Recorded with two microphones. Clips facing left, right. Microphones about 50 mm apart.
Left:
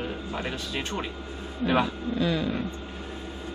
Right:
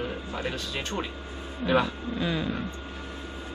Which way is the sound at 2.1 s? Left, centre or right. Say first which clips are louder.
Left 3 dB; centre.